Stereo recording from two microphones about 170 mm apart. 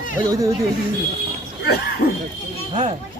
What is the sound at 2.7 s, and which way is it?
Speech, 35° right (ahead or behind).